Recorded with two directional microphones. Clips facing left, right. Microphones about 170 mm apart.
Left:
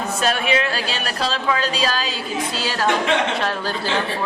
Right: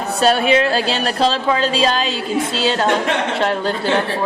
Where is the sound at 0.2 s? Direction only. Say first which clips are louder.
Right 7 dB; 35° right (ahead or behind).